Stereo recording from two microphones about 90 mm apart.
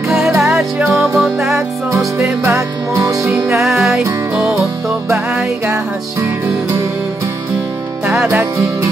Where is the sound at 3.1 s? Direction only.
30° right (ahead or behind).